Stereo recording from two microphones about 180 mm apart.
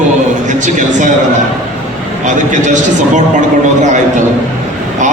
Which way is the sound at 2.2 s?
45° right (ahead or behind).